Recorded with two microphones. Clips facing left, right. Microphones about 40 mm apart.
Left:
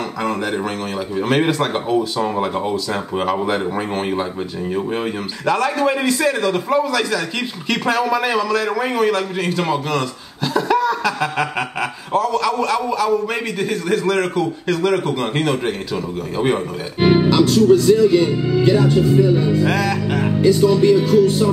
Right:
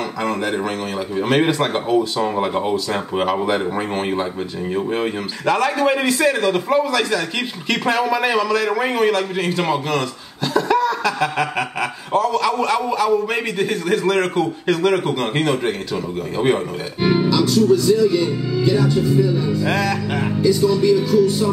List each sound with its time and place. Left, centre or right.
0.2 s a man's voice: centre
10.5 s a man's voice: centre
15.3 s speech: centre
17.0 s speech: left
19.7 s speech: centre
20.4 s speech: left